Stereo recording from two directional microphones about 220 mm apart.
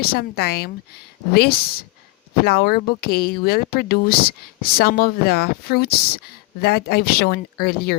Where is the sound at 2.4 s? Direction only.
45° left (ahead or behind).